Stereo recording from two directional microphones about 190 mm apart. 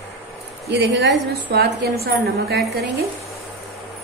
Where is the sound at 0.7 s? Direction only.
65° right (ahead or behind).